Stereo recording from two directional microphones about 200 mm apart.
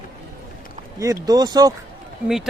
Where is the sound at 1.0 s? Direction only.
20° right (ahead or behind).